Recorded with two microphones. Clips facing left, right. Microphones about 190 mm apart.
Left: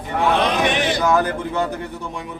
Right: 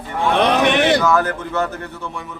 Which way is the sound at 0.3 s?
65° right (ahead or behind).